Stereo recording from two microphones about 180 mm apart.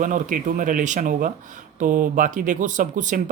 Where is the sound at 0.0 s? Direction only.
45° right (ahead or behind).